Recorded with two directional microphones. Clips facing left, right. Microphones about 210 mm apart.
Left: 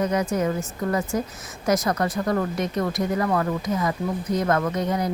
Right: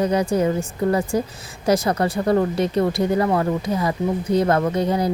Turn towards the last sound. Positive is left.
turn(degrees=-30)  # may be behind; listen again after turning